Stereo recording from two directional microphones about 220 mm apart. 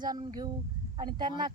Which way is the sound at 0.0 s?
20° right (ahead or behind).